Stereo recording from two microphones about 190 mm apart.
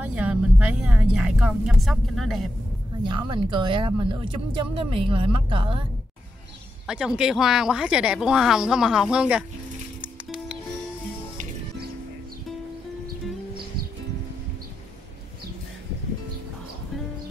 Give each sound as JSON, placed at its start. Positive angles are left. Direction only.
{"t": 0.0, "sound": "speech", "side_deg": -5}
{"t": 3.1, "sound": "speech", "side_deg": -25}
{"t": 6.9, "sound": "speech", "side_deg": -5}
{"t": 10.0, "sound": "music", "side_deg": -5}